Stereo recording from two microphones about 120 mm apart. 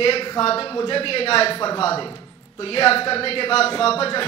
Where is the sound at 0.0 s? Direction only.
50° left (ahead or behind).